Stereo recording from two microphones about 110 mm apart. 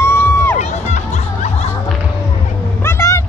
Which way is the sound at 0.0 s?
20° left (ahead or behind).